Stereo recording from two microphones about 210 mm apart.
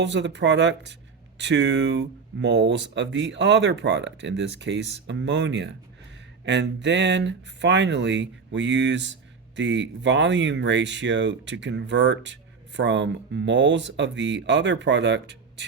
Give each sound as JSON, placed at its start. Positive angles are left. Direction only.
{"t": 0.0, "sound": "speech", "side_deg": -55}